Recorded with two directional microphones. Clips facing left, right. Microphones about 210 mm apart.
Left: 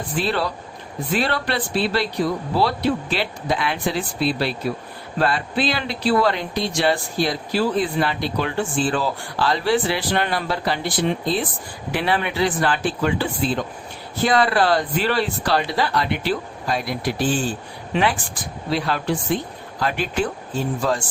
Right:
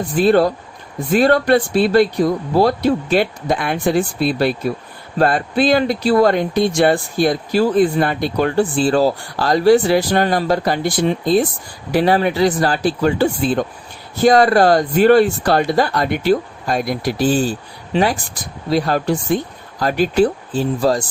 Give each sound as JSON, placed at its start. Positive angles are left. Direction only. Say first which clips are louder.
{"t": 0.2, "sound": "speech", "louder": "right 10 dB", "side_deg": -45}